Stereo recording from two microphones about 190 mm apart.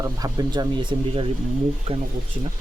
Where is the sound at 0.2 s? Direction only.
20° right (ahead or behind).